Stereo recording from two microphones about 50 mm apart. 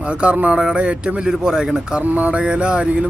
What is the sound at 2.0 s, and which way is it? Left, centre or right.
Speech, right.